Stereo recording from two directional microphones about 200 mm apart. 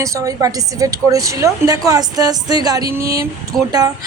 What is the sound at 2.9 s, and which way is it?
Speech, 50° right (ahead or behind).